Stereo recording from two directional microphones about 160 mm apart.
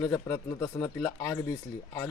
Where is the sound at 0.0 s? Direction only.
20° left (ahead or behind).